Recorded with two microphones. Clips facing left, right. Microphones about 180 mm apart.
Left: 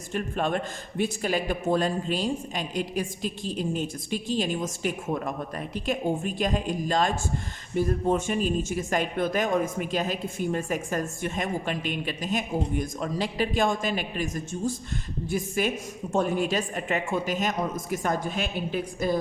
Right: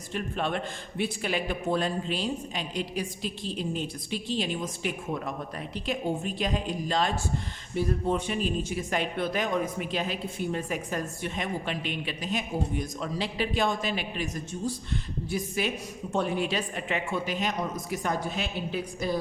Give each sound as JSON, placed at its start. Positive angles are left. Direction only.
{"t": 0.1, "sound": "a man's voice", "side_deg": 45}